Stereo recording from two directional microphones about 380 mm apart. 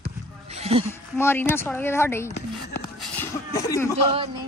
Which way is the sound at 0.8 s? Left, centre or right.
Centre.